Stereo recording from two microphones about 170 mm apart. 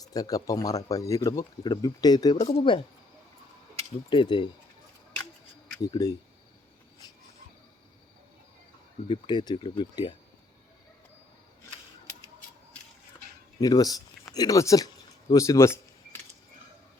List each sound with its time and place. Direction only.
0.0 s speech: 20° left (ahead or behind)
4.1 s speech: 30° left (ahead or behind)
5.7 s speech: 20° left (ahead or behind)
9.0 s speech: 25° left (ahead or behind)
13.6 s speech: 20° left (ahead or behind)